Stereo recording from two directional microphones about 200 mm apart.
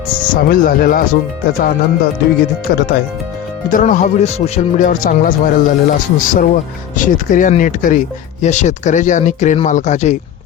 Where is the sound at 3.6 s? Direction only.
40° left (ahead or behind).